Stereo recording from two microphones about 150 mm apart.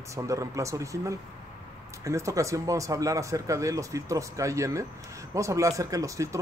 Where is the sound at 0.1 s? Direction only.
20° right (ahead or behind).